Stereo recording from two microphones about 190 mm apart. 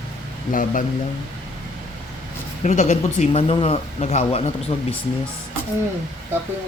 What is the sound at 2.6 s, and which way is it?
Speech, 40° left (ahead or behind).